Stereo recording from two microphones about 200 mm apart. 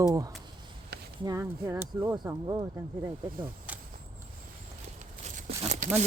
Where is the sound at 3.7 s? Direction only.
5° right (ahead or behind).